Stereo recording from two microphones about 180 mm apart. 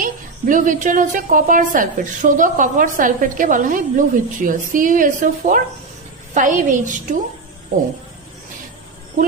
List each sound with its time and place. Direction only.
0.0 s a woman's voice: 45° right (ahead or behind)